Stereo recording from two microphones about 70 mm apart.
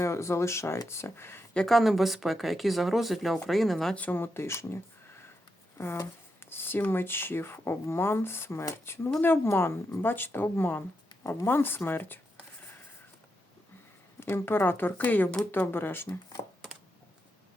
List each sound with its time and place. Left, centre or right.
0.0 s speech: left
1.5 s speech: centre
3.9 s speech: left
6.4 s a sound: left
6.9 s speech: left
14.2 s speech: left